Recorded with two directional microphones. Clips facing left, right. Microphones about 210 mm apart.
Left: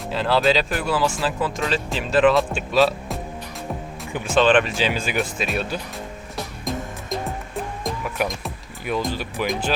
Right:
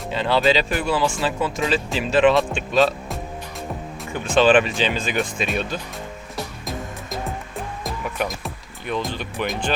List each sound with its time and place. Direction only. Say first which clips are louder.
0.1 s speech: even; centre (ahead or behind)
4.4 s speech: right 1 dB; centre (ahead or behind)
4.8 s speech: even; 10° left (ahead or behind)
6.3 s music: left 2 dB; centre (ahead or behind)
7.9 s speech: left 1 dB; centre (ahead or behind)